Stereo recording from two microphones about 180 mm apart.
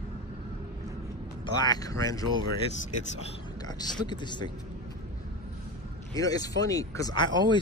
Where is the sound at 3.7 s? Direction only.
25° left (ahead or behind).